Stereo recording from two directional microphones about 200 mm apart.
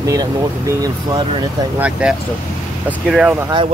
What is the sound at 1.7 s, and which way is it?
Speech, 5° right (ahead or behind).